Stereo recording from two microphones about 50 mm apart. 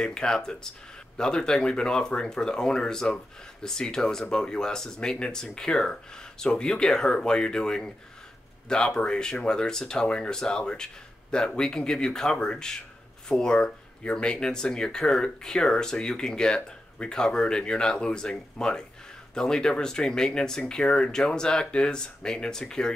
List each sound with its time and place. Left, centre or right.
0.0 s speech: centre